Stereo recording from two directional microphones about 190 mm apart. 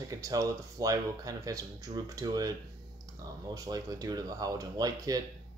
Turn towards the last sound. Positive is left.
turn(degrees=-20)  # may be behind; listen again after turning